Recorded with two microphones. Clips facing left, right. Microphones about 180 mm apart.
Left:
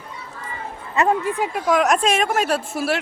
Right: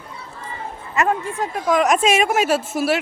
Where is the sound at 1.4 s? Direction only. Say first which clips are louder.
Right 4 dB; centre (ahead or behind).